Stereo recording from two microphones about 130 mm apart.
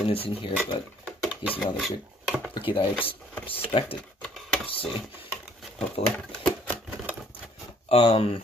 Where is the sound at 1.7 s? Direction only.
5° right (ahead or behind).